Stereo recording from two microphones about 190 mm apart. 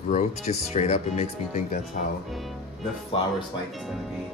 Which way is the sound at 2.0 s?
45° left (ahead or behind).